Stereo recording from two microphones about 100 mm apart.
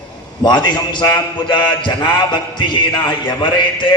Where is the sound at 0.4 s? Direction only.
45° left (ahead or behind).